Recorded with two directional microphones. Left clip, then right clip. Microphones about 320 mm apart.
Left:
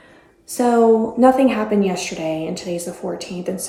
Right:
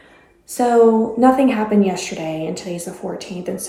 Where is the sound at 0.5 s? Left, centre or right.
Centre.